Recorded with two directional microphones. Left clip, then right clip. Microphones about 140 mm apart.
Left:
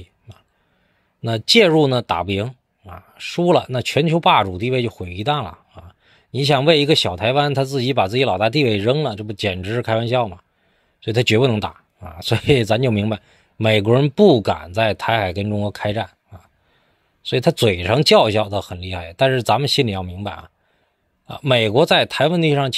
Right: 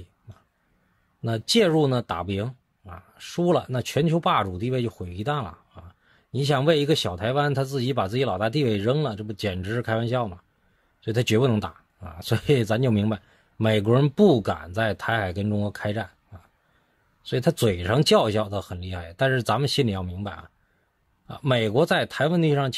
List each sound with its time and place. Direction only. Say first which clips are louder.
1.2 s speech: left 8 dB; 15° left (ahead or behind)
15.4 s speech: left 6 dB; centre (ahead or behind)